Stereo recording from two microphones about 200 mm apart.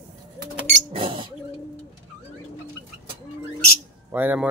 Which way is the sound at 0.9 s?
25° right (ahead or behind).